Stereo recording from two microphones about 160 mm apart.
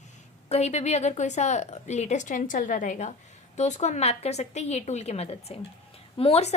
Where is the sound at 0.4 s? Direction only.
45° left (ahead or behind).